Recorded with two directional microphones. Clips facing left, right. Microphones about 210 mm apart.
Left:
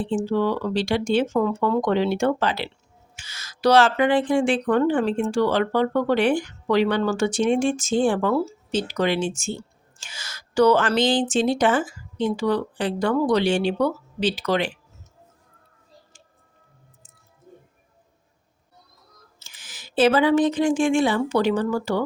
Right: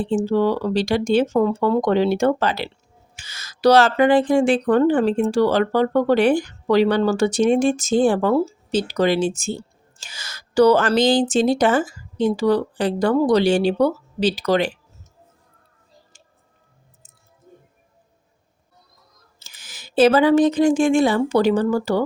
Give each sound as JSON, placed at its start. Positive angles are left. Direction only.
{"t": 0.0, "sound": "speech", "side_deg": -40}
{"t": 19.4, "sound": "a woman's voice", "side_deg": -40}